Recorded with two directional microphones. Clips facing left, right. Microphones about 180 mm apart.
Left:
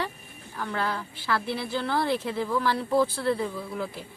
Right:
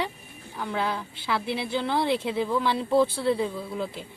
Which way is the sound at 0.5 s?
15° right (ahead or behind).